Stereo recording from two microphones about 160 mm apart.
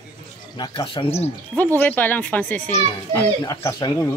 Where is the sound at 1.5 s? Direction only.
10° left (ahead or behind).